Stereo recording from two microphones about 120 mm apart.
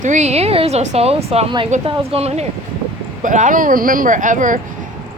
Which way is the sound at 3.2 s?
90° right.